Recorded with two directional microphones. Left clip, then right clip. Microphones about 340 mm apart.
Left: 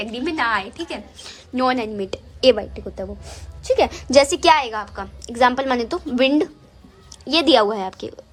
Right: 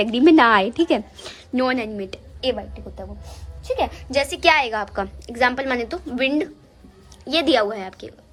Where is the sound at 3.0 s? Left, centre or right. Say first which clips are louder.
Left 5 dB; left; by 8.1 s centre.